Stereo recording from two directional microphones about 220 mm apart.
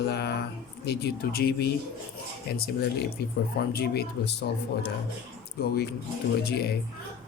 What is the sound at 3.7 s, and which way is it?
Speech, 45° left (ahead or behind).